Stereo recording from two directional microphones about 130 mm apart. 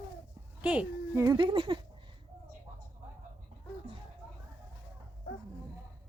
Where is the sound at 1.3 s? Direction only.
40° right (ahead or behind).